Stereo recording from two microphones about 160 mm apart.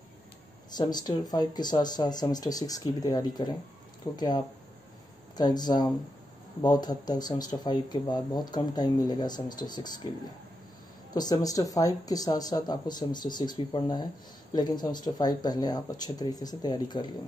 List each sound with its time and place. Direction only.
0.7 s speech: 25° left (ahead or behind)
5.4 s speech: 25° left (ahead or behind)
11.1 s speech: 25° left (ahead or behind)